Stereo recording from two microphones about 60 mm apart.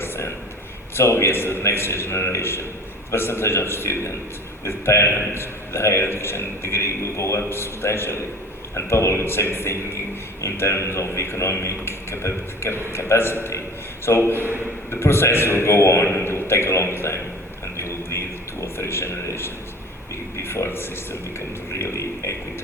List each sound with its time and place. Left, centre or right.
0.9 s a man's voice: left
16.0 s a man's voice: left
16.3 s a man's voice: left
17.7 s a sound: left
20.3 s a man's voice: left